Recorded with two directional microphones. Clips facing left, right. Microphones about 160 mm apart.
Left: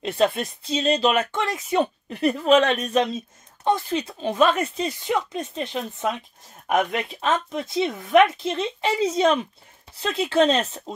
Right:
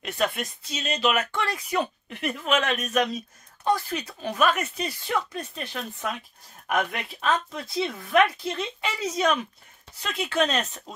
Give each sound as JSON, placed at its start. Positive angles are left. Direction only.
{"t": 0.0, "sound": "speech", "side_deg": 25}